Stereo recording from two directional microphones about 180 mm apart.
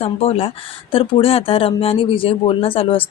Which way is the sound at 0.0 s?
35° left (ahead or behind).